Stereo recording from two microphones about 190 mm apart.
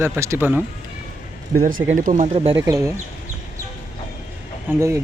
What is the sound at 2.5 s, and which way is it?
Speech, 15° right (ahead or behind).